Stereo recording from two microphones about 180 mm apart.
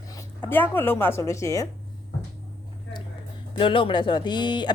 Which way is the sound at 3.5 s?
30° left (ahead or behind).